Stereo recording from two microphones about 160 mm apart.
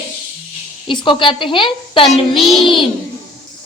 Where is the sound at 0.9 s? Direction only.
30° left (ahead or behind).